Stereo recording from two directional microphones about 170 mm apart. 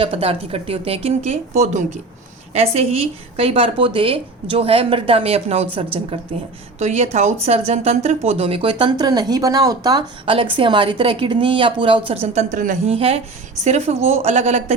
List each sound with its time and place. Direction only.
0.0 s speech: 35° right (ahead or behind)